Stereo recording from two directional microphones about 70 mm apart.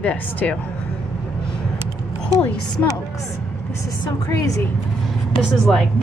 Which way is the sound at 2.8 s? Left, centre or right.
Left.